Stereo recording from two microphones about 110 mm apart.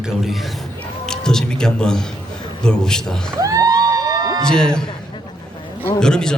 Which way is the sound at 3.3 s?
30° right (ahead or behind).